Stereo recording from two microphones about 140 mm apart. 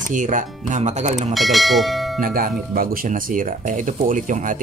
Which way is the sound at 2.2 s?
90° right.